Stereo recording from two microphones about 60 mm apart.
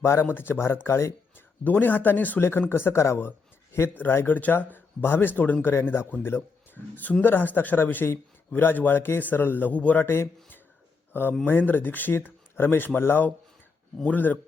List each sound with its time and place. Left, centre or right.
0.0 s speech: left
1.6 s speech: left
10.0 s speech: left